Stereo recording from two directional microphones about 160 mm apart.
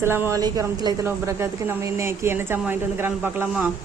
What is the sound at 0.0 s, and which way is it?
A woman's voice, 15° right (ahead or behind).